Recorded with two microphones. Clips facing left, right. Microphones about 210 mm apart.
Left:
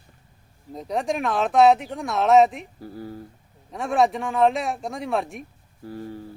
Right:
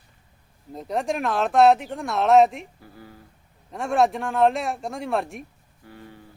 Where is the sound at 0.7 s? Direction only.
Centre (ahead or behind).